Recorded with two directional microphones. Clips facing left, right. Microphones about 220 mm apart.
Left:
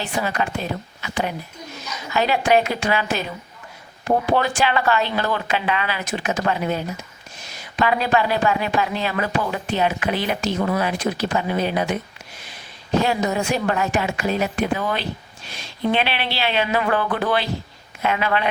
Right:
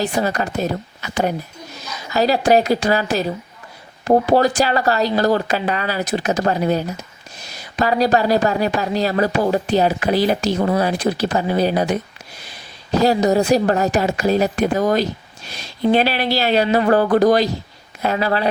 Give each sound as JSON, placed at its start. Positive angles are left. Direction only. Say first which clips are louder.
{"t": 0.0, "sound": "speech", "louder": "right 4 dB", "side_deg": -40}
{"t": 13.0, "sound": "speech", "louder": "right 7 dB", "side_deg": -35}